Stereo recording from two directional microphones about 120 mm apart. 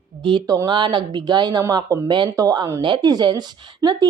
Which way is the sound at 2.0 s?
40° right (ahead or behind).